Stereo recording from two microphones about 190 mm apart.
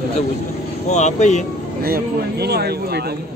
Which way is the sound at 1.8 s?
55° right (ahead or behind).